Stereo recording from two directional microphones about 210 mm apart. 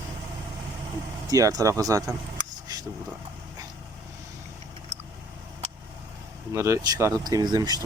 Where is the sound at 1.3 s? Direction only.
15° right (ahead or behind).